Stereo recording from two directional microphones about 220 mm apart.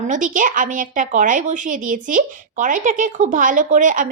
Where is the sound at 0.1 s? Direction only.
35° right (ahead or behind).